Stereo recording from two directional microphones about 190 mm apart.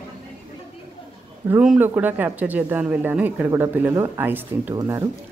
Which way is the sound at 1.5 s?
5° right (ahead or behind).